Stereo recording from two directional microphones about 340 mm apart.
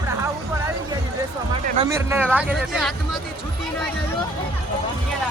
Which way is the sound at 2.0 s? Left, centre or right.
Centre.